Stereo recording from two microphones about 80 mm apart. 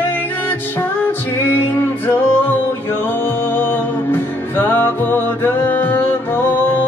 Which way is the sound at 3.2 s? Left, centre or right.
Left.